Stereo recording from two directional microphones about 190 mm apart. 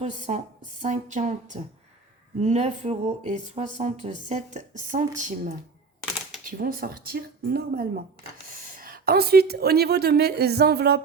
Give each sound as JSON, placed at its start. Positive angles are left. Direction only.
{"t": 0.0, "sound": "a woman's voice", "side_deg": -35}